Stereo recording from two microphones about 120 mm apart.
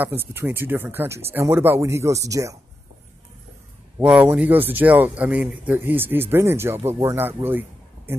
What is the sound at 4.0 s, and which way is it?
Speech, 10° right (ahead or behind).